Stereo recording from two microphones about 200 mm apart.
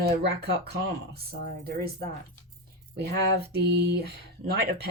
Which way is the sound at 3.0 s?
55° right (ahead or behind).